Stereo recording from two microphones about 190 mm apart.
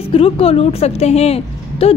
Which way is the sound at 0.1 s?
30° left (ahead or behind).